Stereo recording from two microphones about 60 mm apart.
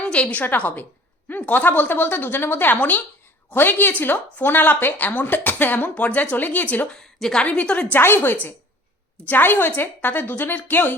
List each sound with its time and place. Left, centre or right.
0.0 s a woman's voice: centre
7.2 s a woman's voice: centre
7.4 s speech: left
7.9 s a woman's voice: left